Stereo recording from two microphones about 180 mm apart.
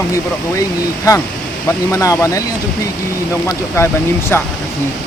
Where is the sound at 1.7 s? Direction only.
15° left (ahead or behind).